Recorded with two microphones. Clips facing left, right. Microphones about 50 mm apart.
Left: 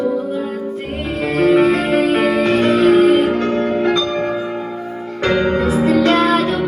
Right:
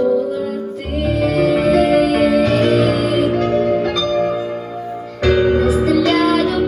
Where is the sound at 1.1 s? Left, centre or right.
Left.